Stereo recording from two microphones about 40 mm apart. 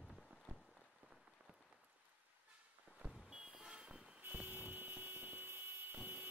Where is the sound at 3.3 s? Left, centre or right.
Centre.